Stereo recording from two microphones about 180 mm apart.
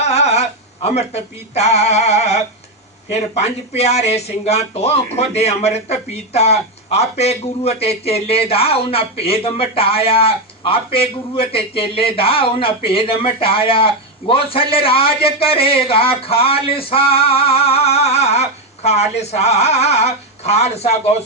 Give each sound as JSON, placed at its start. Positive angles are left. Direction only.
{"t": 0.0, "sound": "a man's voice", "side_deg": 35}